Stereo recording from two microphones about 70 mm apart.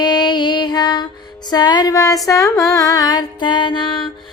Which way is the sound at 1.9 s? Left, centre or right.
Left.